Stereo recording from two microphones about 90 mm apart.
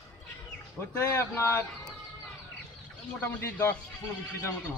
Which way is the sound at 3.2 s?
25° left (ahead or behind).